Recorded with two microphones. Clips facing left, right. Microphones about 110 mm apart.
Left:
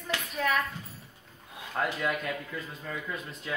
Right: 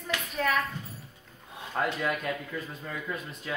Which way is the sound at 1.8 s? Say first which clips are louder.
Right 1 dB; centre (ahead or behind).